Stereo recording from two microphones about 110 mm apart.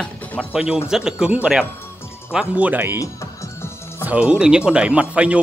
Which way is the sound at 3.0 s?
25° left (ahead or behind).